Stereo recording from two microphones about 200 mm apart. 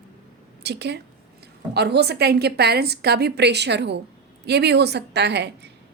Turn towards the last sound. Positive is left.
turn(degrees=-55)  # may be behind; listen again after turning